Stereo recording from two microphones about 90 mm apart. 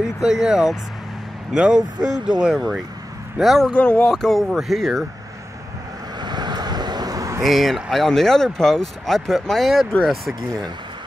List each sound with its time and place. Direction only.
0.0 s speech: 5° right (ahead or behind)
3.7 s speech: 10° left (ahead or behind)
6.2 s vehicle: 50° right (ahead or behind)
7.4 s speech: centre (ahead or behind)